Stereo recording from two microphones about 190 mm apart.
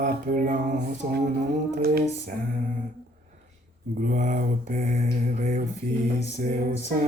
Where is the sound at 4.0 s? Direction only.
45° right (ahead or behind).